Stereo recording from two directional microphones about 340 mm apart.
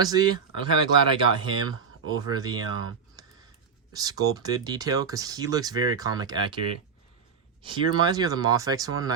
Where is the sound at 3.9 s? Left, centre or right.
Centre.